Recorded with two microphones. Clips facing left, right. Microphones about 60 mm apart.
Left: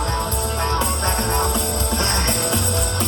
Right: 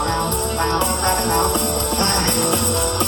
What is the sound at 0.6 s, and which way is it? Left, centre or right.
Music, right.